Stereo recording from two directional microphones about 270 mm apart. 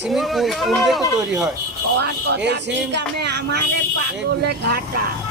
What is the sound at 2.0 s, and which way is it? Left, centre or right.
Speech, right.